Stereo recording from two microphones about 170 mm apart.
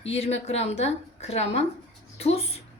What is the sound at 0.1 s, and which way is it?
A woman's voice, 40° left (ahead or behind).